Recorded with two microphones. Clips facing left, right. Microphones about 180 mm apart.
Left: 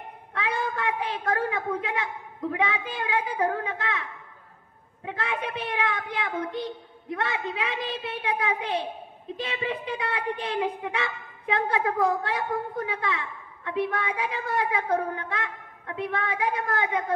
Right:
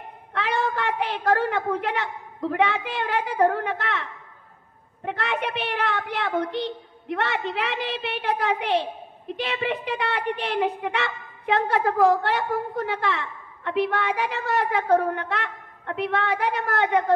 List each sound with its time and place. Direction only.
0.3 s a woman's voice: 80° right